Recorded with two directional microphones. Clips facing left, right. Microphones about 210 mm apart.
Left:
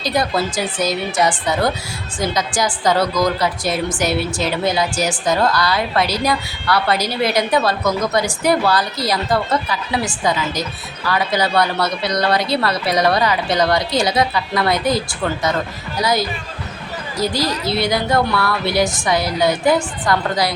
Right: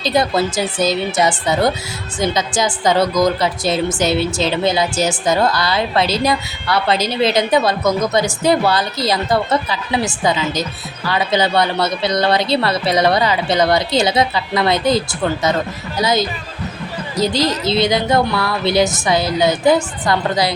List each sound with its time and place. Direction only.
0.0 s a woman's voice: 25° right (ahead or behind)